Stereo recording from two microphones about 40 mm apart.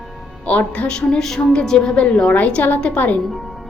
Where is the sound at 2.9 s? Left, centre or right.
Left.